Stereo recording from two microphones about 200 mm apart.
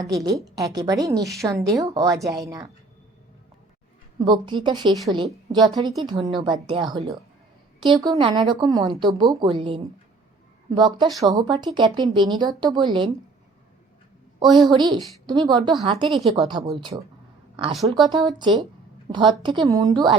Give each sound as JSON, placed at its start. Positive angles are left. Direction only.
{"t": 0.0, "sound": "a woman's voice", "side_deg": -15}
{"t": 4.2, "sound": "a woman's voice", "side_deg": -20}
{"t": 14.3, "sound": "a woman's voice", "side_deg": -20}
{"t": 18.1, "sound": "a woman's voice", "side_deg": -20}